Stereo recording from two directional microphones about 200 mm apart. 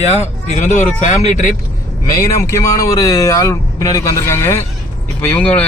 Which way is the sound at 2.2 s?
15° left (ahead or behind).